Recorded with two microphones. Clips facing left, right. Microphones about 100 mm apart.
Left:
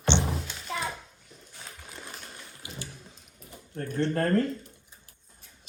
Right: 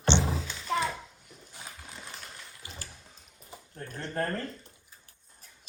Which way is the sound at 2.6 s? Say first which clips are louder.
Left 6 dB; 40° right (ahead or behind).